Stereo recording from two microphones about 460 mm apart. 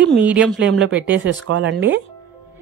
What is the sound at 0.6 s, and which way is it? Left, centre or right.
Speech, right.